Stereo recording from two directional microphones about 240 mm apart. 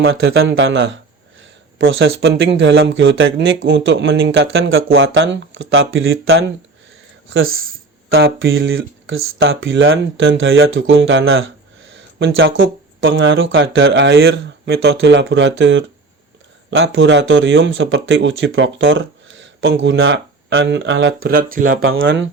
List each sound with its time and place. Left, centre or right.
0.0 s speech: right
8.1 s speech: right
21.2 s speech: right
21.8 s speech: right